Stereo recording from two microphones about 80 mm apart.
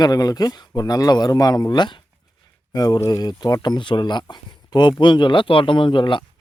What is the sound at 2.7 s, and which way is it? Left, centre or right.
Speech, left.